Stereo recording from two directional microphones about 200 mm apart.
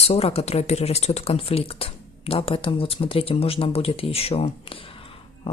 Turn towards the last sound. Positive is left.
turn(degrees=25)  # may be behind; listen again after turning